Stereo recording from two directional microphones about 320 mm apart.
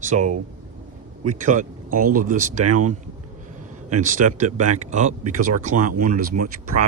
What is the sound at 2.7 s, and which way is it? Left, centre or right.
Speech, right.